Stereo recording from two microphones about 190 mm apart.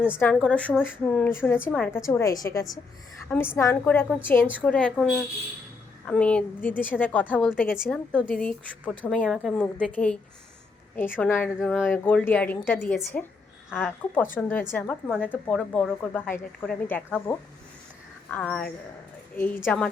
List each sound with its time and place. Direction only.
0.2 s a woman's voice: 5° left (ahead or behind)
6.1 s a woman's voice: 5° left (ahead or behind)